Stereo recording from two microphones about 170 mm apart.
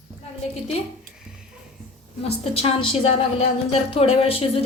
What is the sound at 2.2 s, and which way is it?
A woman's voice, 35° left (ahead or behind).